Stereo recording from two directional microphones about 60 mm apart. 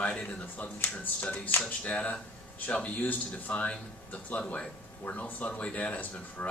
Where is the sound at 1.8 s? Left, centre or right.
Left.